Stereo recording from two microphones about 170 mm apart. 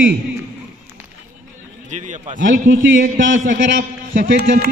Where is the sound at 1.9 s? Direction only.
45° right (ahead or behind).